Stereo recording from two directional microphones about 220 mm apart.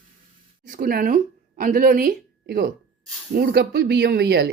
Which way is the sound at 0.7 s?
40° right (ahead or behind).